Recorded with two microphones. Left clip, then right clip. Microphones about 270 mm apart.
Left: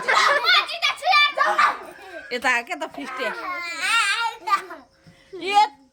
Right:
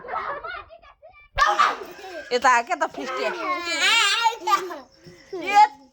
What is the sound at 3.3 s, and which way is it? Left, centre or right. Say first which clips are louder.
Crying: right 3 dB; left.